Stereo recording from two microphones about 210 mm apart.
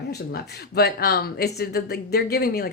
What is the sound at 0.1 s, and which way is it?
Speech, 50° left (ahead or behind).